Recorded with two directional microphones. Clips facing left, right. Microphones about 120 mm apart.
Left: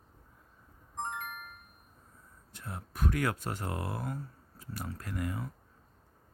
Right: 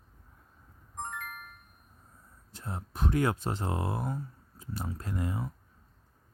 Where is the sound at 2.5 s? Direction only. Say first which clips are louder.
Right 3 dB; 30° right (ahead or behind).